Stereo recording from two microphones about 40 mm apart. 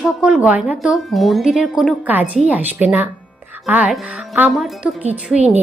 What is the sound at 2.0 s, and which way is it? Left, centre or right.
A woman's voice, right.